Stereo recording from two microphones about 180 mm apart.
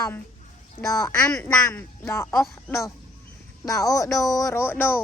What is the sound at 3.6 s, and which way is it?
Speech, 20° left (ahead or behind).